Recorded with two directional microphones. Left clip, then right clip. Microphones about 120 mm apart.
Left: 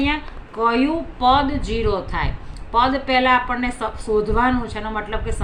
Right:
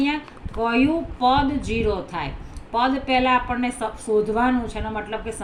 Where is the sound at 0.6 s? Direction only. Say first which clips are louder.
Left 2 dB; 25° right (ahead or behind).